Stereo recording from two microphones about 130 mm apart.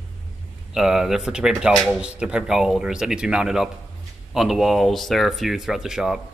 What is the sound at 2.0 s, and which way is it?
Speech, 10° right (ahead or behind).